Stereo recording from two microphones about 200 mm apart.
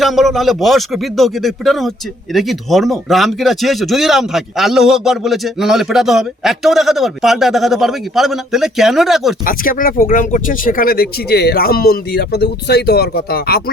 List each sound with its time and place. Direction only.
0.0 s speech: centre (ahead or behind)
9.5 s speech: 45° left (ahead or behind)